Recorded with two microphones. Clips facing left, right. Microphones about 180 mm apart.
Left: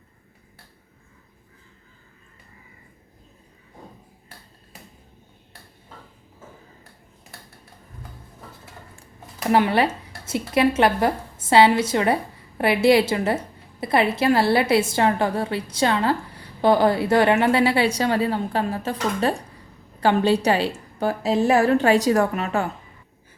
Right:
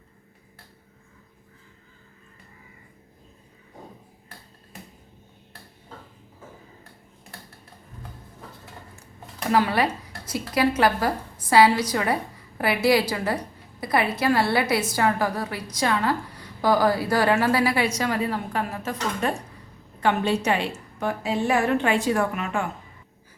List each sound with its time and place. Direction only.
9.5 s a woman's voice: 25° left (ahead or behind)